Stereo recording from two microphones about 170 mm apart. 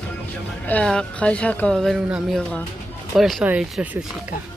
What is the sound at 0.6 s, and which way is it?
A woman's voice, 5° left (ahead or behind).